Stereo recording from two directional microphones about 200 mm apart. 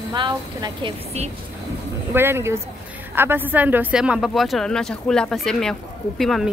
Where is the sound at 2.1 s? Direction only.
10° right (ahead or behind).